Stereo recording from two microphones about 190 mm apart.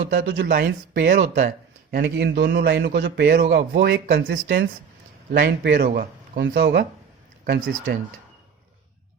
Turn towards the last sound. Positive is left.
turn(degrees=-60)  # may be behind; listen again after turning